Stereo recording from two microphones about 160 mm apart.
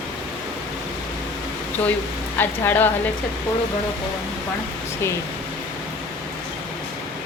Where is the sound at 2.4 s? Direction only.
10° left (ahead or behind).